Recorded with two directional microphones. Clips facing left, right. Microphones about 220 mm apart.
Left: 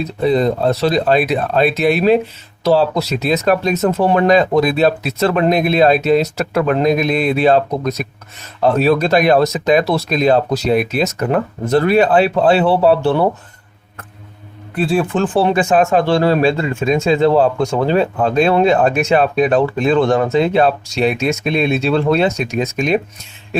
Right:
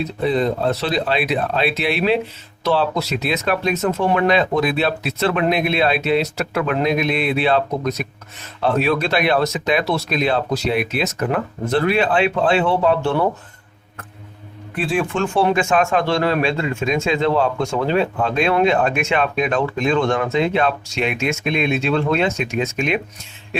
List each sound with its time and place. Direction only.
0.0 s speech: 40° left (ahead or behind)
14.8 s speech: 40° left (ahead or behind)